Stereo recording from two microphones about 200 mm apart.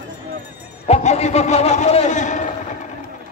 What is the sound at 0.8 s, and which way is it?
A man's voice, 30° left (ahead or behind).